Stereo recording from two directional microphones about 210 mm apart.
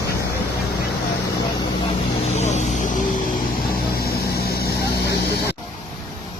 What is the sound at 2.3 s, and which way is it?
Vehicle, 35° left (ahead or behind).